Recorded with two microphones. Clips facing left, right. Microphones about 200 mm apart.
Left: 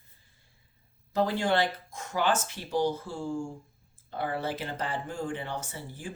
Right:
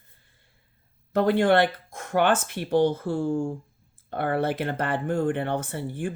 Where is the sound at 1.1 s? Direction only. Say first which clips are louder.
Right 7 dB; 60° right (ahead or behind).